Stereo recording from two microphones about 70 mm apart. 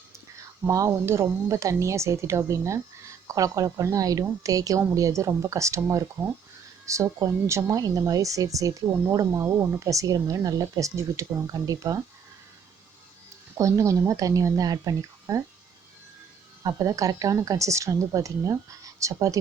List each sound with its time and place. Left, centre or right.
0.7 s speech: right
0.9 s speech: right
9.6 s speech: right
11.4 s a woman's voice: right
13.6 s speech: right
16.6 s a woman's voice: right